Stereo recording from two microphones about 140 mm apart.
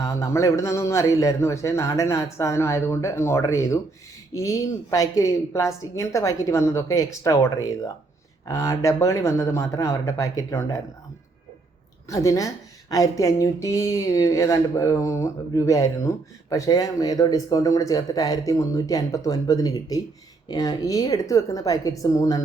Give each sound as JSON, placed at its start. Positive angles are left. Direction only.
{"t": 0.0, "sound": "speech", "side_deg": 20}
{"t": 12.0, "sound": "speech", "side_deg": 25}